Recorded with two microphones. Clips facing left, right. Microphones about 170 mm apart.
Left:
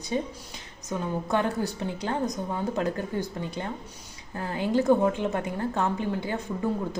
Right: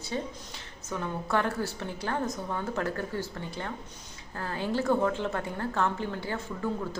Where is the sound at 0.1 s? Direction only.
20° left (ahead or behind).